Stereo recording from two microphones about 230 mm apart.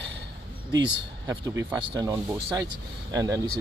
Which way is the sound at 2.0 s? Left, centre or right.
Centre.